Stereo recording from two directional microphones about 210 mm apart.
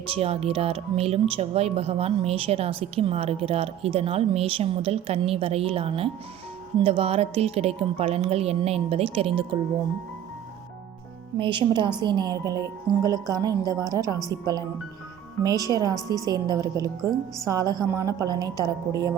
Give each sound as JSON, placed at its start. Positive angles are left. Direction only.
{"t": 0.1, "sound": "speech", "side_deg": -30}
{"t": 11.3, "sound": "a woman's voice", "side_deg": -25}